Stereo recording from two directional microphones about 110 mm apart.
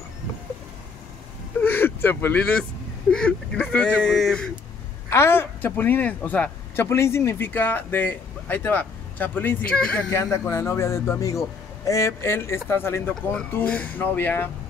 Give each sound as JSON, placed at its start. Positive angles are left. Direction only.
{"t": 1.6, "sound": "vehicle", "side_deg": 15}
{"t": 3.1, "sound": "speech", "side_deg": 10}
{"t": 5.1, "sound": "a man's voice", "side_deg": 20}